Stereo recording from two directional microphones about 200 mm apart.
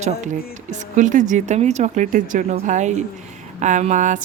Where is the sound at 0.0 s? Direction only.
35° right (ahead or behind).